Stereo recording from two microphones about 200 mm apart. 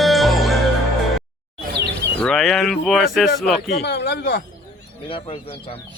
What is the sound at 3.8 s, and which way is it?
Speech, 55° left (ahead or behind).